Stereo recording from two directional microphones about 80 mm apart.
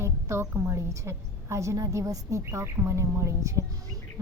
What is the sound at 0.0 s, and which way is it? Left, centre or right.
A woman's voice, right.